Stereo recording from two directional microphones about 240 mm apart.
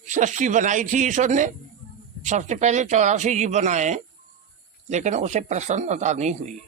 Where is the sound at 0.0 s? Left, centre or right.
Right.